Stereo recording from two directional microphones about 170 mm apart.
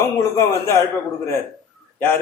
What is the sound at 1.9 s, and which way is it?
Speech, 10° left (ahead or behind).